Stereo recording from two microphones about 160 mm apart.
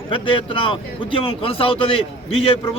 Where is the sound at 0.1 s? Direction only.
35° left (ahead or behind).